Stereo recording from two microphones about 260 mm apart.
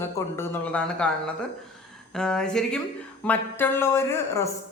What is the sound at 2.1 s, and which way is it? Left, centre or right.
A woman's voice, centre.